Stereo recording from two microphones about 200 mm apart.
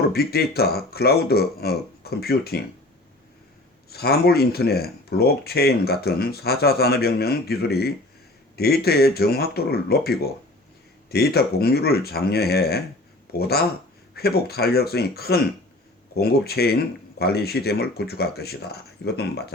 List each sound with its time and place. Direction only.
0.1 s speech: 50° left (ahead or behind)
3.8 s speech: 50° left (ahead or behind)